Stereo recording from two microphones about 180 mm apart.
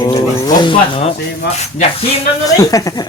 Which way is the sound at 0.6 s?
30° left (ahead or behind).